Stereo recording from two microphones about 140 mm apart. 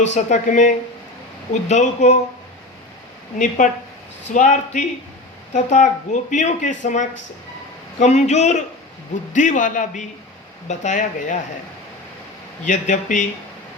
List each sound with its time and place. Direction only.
0.0 s speech: 60° left (ahead or behind)
3.3 s speech: 65° left (ahead or behind)
12.6 s speech: 60° left (ahead or behind)